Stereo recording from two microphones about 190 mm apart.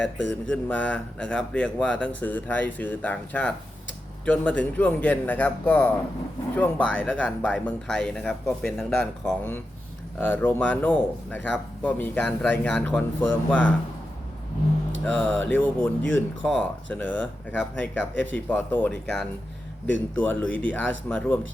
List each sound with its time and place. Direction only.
0.2 s a sound: 70° left (ahead or behind)
0.5 s speech: 5° left (ahead or behind)
15.0 s speech: 10° left (ahead or behind)